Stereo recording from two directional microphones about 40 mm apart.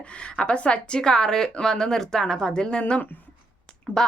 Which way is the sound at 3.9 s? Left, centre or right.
Left.